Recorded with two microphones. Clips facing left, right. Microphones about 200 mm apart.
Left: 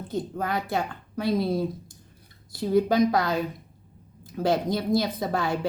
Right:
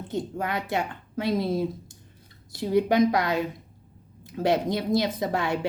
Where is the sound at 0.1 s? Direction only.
20° right (ahead or behind).